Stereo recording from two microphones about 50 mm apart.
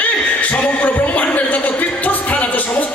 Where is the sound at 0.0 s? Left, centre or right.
Left.